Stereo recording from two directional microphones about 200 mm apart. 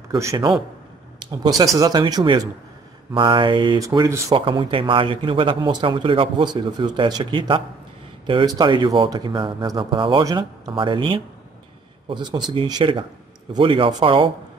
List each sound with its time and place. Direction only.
0.1 s speech: 20° right (ahead or behind)